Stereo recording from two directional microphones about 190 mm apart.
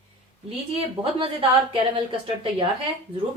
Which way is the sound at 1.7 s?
25° right (ahead or behind).